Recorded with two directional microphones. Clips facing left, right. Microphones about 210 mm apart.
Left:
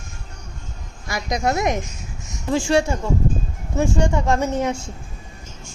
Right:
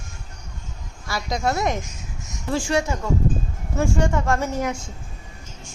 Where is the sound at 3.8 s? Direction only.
20° left (ahead or behind).